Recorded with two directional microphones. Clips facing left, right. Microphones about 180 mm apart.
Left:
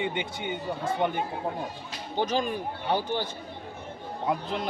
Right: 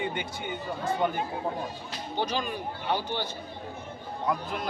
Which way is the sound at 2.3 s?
45° left (ahead or behind).